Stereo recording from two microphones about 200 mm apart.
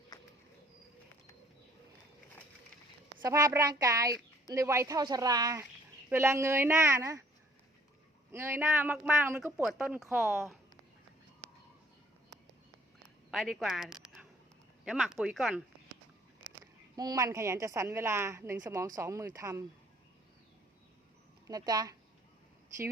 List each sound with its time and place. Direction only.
0.1 s a sound: 20° left (ahead or behind)
3.2 s a woman's voice: 15° right (ahead or behind)
8.3 s a woman's voice: 10° right (ahead or behind)
13.3 s a woman's voice: centre (ahead or behind)
16.9 s a woman's voice: 20° right (ahead or behind)
21.4 s speech: 20° right (ahead or behind)